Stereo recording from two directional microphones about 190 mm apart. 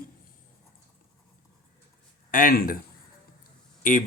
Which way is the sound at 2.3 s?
50° left (ahead or behind).